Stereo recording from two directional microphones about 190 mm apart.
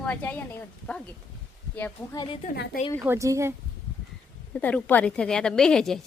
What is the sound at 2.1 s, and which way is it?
Speech, 25° left (ahead or behind).